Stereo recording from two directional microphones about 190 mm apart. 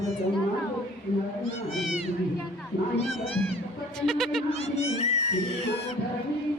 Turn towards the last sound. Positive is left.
turn(degrees=35)  # may be behind; listen again after turning